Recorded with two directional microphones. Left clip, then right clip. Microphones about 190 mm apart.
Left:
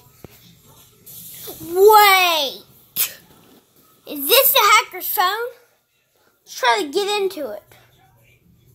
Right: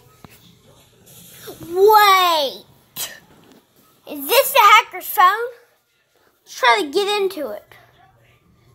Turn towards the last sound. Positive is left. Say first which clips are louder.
# right 1 dB
turn(degrees=0)  # may be behind; listen again after turning